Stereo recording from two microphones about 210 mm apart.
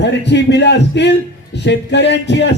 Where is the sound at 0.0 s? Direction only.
55° left (ahead or behind).